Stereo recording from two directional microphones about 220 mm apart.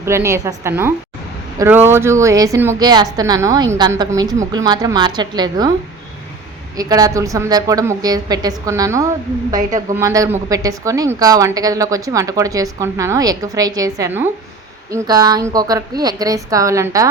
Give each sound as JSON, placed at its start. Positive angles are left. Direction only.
{"t": 0.0, "sound": "a woman's voice", "side_deg": -10}
{"t": 6.7, "sound": "a woman's voice", "side_deg": -15}